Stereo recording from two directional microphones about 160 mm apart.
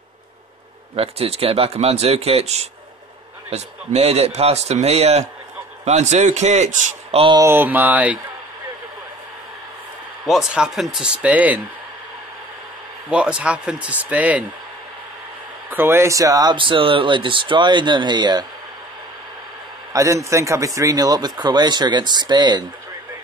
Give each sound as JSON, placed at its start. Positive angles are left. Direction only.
{"t": 0.9, "sound": "a man's voice", "side_deg": -40}
{"t": 7.2, "sound": "a man's voice", "side_deg": -30}
{"t": 7.4, "sound": "speech", "side_deg": -10}
{"t": 10.2, "sound": "speech", "side_deg": -5}
{"t": 13.1, "sound": "speech", "side_deg": -5}
{"t": 15.7, "sound": "a man's voice", "side_deg": -15}
{"t": 19.9, "sound": "a man's voice", "side_deg": -20}